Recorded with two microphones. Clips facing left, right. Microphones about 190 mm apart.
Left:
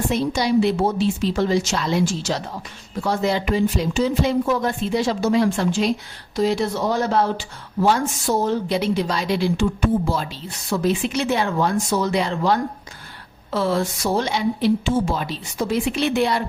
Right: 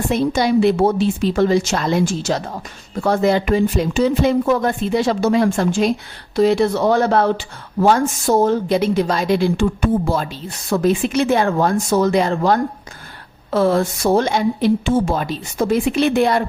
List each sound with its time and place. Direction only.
0.1 s speech: 55° right (ahead or behind)
6.3 s speech: 60° right (ahead or behind)